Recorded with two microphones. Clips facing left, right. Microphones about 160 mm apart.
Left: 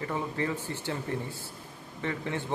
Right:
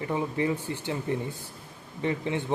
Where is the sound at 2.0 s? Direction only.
20° right (ahead or behind).